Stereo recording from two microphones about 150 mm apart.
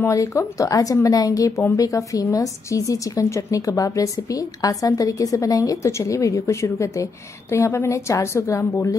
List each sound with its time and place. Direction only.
0.0 s speech: 20° left (ahead or behind)